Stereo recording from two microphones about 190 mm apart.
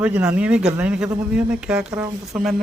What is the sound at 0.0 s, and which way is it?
Speech, 5° right (ahead or behind).